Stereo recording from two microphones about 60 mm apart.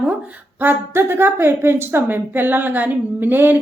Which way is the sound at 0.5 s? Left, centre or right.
Right.